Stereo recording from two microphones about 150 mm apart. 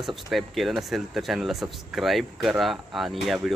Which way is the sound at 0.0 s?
Centre (ahead or behind).